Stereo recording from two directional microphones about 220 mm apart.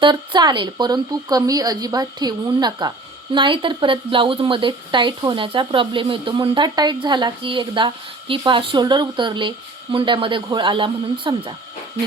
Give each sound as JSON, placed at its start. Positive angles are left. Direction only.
{"t": 0.0, "sound": "speech", "side_deg": -20}